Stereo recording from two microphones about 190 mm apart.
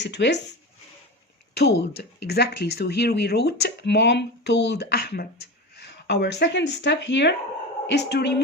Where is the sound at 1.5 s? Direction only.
60° left (ahead or behind).